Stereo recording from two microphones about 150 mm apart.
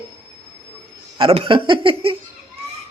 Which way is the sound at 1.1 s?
35° right (ahead or behind).